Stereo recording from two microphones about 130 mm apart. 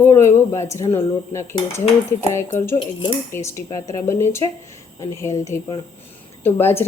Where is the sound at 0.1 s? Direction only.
20° left (ahead or behind).